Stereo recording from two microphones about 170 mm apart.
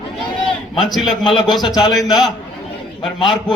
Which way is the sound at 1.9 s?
Centre (ahead or behind).